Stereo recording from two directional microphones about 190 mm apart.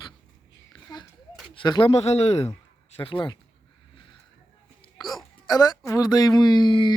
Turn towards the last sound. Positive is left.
turn(degrees=25)  # may be behind; listen again after turning